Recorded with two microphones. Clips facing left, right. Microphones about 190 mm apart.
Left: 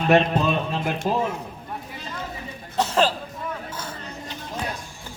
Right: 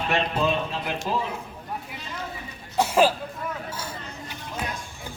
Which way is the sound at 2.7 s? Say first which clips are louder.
Right 1 dB; 10° right (ahead or behind).